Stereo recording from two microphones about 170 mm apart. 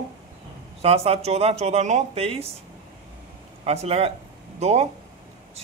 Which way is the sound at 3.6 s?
35° right (ahead or behind).